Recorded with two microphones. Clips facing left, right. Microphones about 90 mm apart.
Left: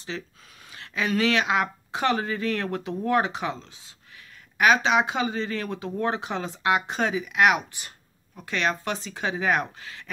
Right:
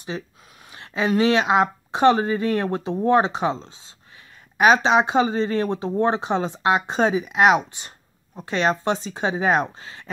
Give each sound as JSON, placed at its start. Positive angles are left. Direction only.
{"t": 0.1, "sound": "speech", "side_deg": -20}